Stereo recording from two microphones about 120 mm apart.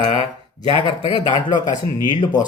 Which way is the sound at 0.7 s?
40° left (ahead or behind).